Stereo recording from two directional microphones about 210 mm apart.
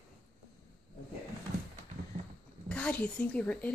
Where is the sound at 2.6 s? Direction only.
5° left (ahead or behind).